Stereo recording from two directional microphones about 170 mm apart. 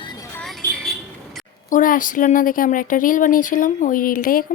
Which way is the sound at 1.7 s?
50° left (ahead or behind).